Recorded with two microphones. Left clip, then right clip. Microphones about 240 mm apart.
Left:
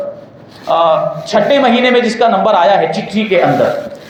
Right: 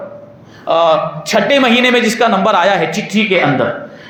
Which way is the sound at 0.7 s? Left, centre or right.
Right.